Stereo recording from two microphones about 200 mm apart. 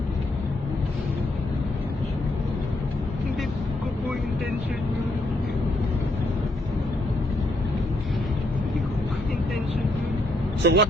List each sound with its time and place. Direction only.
10.6 s speech: 60° right (ahead or behind)